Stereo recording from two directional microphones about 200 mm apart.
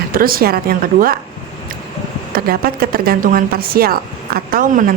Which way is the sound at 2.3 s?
50° right (ahead or behind).